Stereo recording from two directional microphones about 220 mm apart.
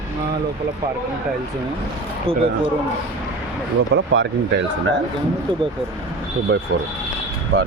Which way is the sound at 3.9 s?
55° right (ahead or behind).